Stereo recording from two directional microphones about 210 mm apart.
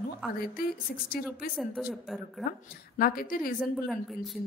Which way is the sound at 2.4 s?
45° left (ahead or behind).